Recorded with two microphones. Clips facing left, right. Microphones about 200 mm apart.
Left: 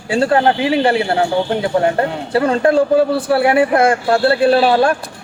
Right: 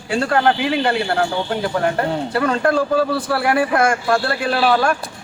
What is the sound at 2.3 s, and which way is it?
A man's voice, 25° left (ahead or behind).